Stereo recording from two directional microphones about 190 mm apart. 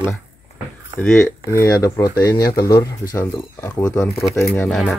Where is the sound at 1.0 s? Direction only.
10° left (ahead or behind).